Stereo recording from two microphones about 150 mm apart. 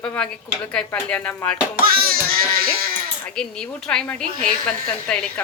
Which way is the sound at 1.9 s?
80° right.